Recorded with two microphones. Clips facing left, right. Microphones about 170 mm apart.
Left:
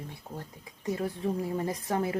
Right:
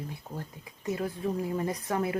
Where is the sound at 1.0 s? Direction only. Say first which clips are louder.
Even; 30° left (ahead or behind).